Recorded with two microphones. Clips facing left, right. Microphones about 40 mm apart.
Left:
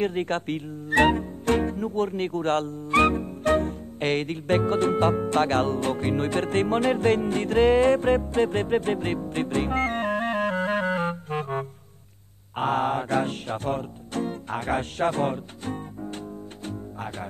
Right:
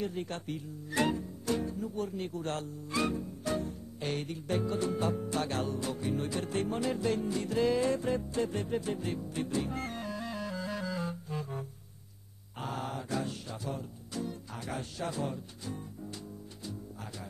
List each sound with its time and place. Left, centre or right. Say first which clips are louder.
0.0 s speech: left 11 dB; left
12.5 s music: left 14 dB; left